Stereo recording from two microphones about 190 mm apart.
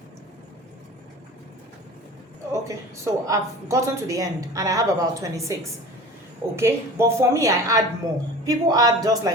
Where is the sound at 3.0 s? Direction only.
15° right (ahead or behind).